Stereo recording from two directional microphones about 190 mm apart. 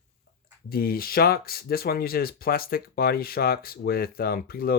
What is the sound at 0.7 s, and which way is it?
Speech, 50° left (ahead or behind).